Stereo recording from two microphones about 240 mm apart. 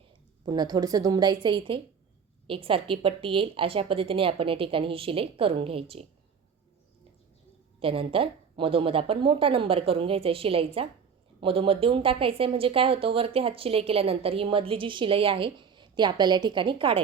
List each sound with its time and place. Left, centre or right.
0.4 s a woman's voice: centre
7.8 s a woman's voice: right